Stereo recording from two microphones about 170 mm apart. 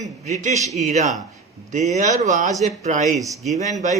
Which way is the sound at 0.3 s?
40° right (ahead or behind).